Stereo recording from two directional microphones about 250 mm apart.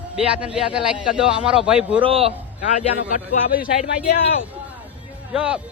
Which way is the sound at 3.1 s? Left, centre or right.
Left.